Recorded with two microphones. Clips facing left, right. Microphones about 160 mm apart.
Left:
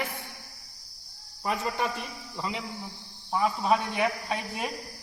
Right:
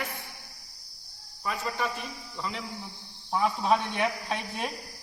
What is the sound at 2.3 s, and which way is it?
Speech, 15° left (ahead or behind).